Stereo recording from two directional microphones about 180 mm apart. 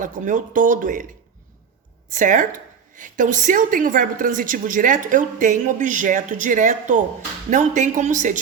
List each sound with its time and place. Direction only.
0.0 s a woman's voice: 45° right (ahead or behind)
2.1 s a woman's voice: 45° right (ahead or behind)